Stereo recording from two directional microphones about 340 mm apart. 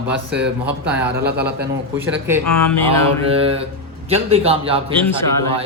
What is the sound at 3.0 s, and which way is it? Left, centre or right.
Speech, centre.